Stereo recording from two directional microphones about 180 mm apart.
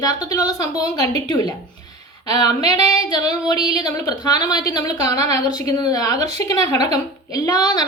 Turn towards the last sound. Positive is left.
turn(degrees=20)  # may be behind; listen again after turning